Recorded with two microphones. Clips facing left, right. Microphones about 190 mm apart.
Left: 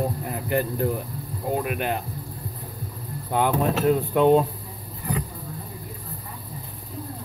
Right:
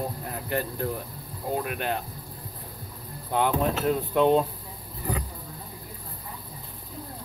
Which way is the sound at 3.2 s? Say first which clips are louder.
Left 2 dB; 5° left (ahead or behind).